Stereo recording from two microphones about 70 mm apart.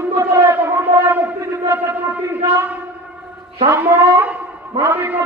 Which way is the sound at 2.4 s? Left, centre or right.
Right.